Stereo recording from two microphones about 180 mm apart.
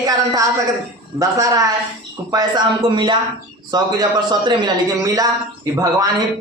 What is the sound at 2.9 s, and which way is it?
Speech, 25° right (ahead or behind).